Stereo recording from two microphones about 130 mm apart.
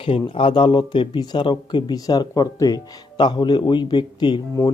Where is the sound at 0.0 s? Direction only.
45° left (ahead or behind).